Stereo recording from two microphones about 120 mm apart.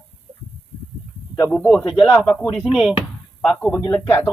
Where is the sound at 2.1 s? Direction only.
15° left (ahead or behind).